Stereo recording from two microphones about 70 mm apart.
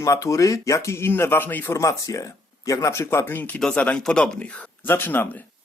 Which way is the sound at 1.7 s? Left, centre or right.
Left.